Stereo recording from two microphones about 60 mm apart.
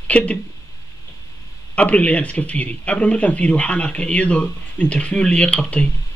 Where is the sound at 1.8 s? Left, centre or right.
Left.